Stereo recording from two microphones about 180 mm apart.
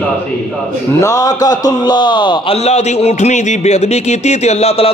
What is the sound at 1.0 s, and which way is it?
A man's voice, 20° left (ahead or behind).